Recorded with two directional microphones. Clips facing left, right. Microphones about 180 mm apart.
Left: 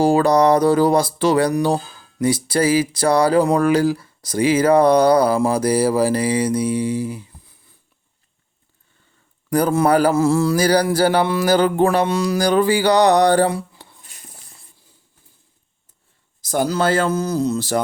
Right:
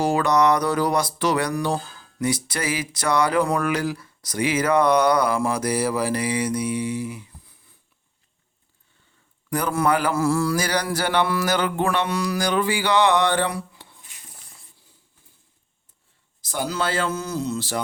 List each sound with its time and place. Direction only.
0.0 s speech: 30° left (ahead or behind)
9.5 s a man's voice: 35° left (ahead or behind)
10.2 s speech: 25° left (ahead or behind)
12.0 s a sound: 25° left (ahead or behind)
16.4 s speech: 40° left (ahead or behind)